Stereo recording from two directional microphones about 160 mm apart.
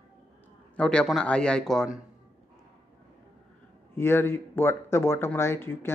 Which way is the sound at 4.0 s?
15° left (ahead or behind).